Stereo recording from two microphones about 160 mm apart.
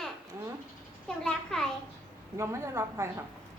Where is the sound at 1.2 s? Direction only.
5° left (ahead or behind).